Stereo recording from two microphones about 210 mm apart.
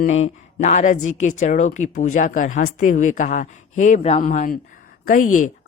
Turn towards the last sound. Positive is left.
turn(degrees=40)  # may be behind; listen again after turning